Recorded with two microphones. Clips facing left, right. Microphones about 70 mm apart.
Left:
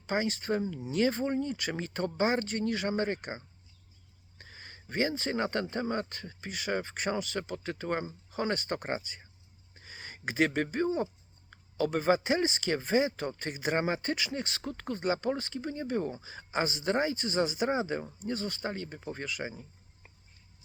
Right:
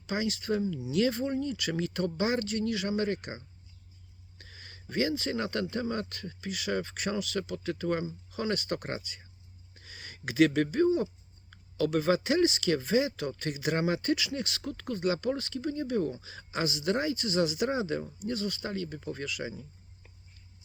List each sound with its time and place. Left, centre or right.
0.1 s speech: left